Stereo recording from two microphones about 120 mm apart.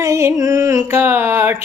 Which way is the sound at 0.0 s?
25° right (ahead or behind).